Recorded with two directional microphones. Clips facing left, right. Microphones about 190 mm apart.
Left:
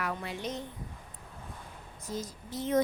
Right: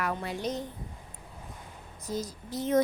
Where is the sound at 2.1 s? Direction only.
40° right (ahead or behind).